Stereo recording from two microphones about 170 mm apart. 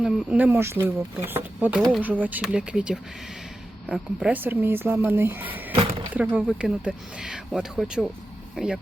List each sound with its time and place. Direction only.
0.0 s speech: 10° right (ahead or behind)
5.7 s a sound: 35° right (ahead or behind)
6.1 s speech: 5° right (ahead or behind)